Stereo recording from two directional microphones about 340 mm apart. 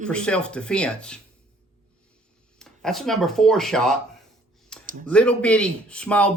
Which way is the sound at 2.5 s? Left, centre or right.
Centre.